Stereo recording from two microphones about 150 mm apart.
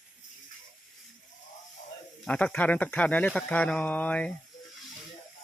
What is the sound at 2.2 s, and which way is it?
Speech, 10° left (ahead or behind).